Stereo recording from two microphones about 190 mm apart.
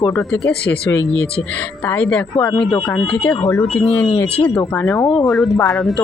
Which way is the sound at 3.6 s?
Centre (ahead or behind).